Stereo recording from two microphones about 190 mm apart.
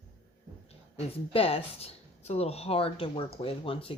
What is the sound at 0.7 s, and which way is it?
Speech, 30° left (ahead or behind).